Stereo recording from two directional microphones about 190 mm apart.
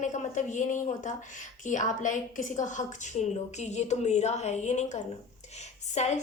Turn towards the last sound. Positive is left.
turn(degrees=35)  # may be behind; listen again after turning